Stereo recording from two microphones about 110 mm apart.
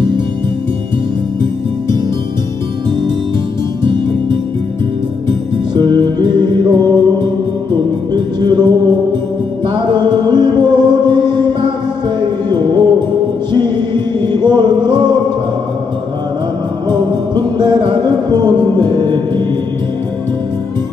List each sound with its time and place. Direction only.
3.8 s music: 45° right (ahead or behind)
5.8 s music: 45° right (ahead or behind)
9.8 s music: 45° right (ahead or behind)
16.9 s music: 40° right (ahead or behind)